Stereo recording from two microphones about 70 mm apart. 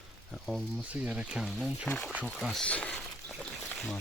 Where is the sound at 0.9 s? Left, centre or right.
Centre.